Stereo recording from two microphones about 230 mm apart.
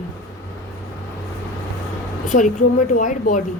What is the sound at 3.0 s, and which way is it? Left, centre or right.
Speech, left.